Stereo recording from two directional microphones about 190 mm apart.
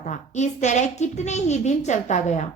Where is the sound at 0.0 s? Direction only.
40° left (ahead or behind).